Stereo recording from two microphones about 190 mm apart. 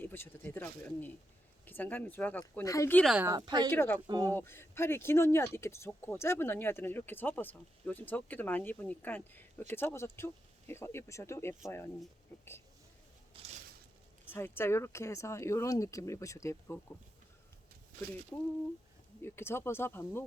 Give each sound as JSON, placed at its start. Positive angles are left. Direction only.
{"t": 0.0, "sound": "speech", "side_deg": 10}
{"t": 3.0, "sound": "speech", "side_deg": 0}
{"t": 3.2, "sound": "speech", "side_deg": -20}
{"t": 3.7, "sound": "speech", "side_deg": 10}
{"t": 4.0, "sound": "speech", "side_deg": -20}
{"t": 4.4, "sound": "speech", "side_deg": 10}
{"t": 14.3, "sound": "speech", "side_deg": 10}
{"t": 19.2, "sound": "speech", "side_deg": 10}